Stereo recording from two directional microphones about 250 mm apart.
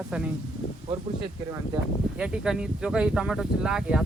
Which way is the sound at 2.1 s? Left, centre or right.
Centre.